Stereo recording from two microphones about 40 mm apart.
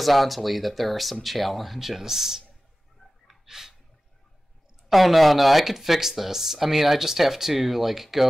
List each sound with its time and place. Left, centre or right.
0.0 s speech: centre
3.3 s a sound: centre
4.8 s speech: centre